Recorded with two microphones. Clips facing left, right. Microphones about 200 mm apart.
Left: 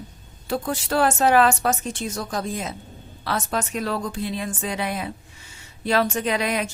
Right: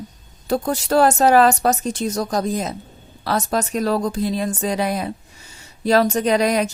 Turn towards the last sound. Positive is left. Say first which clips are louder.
# right 6 dB
turn(degrees=-40)  # may be behind; listen again after turning